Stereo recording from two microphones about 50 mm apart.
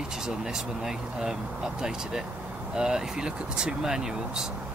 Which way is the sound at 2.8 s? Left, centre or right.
Centre.